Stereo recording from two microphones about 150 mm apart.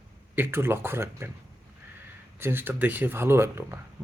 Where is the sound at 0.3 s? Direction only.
15° right (ahead or behind).